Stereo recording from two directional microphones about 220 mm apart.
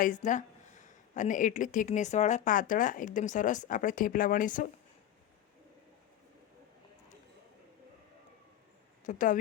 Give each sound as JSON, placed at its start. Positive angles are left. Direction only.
{"t": 0.0, "sound": "speech", "side_deg": 35}
{"t": 9.0, "sound": "speech", "side_deg": 35}